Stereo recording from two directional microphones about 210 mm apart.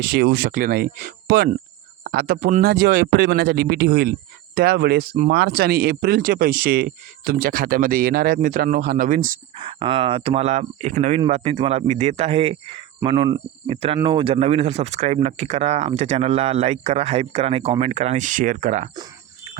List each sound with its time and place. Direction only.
0.0 s speech: 50° right (ahead or behind)
9.6 s speech: 25° right (ahead or behind)